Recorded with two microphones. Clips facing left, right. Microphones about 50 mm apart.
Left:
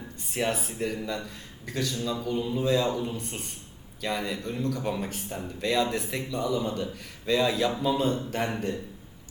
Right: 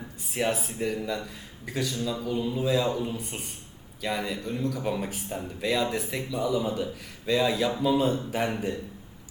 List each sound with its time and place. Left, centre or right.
0.2 s speech: centre